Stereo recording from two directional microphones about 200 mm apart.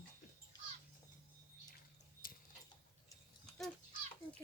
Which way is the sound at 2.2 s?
45° left (ahead or behind).